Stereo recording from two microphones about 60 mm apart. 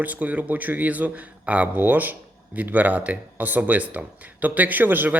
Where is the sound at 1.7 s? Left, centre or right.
Right.